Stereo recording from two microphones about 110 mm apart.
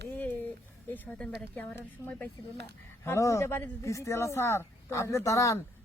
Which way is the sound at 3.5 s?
15° left (ahead or behind).